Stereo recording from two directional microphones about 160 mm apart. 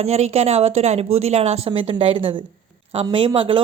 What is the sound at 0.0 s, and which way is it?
A woman's voice, 40° right (ahead or behind).